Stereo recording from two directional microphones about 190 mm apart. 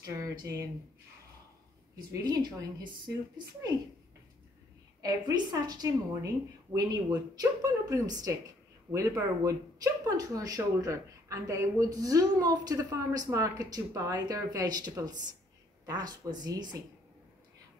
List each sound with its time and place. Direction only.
0.0 s speech: 15° right (ahead or behind)
2.2 s a woman's voice: 20° right (ahead or behind)
5.0 s a woman's voice: 20° right (ahead or behind)